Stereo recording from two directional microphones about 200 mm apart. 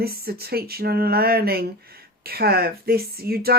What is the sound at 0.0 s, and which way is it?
Speech, 50° right (ahead or behind).